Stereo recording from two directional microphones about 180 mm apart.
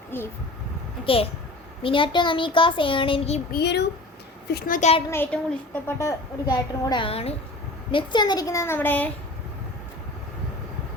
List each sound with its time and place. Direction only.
0.1 s a woman's voice: 10° left (ahead or behind)
1.0 s a child's voice: 30° left (ahead or behind)
3.5 s a child's voice: 65° left (ahead or behind)
4.5 s a woman's voice: 50° left (ahead or behind)
5.1 s a woman's voice: 10° left (ahead or behind)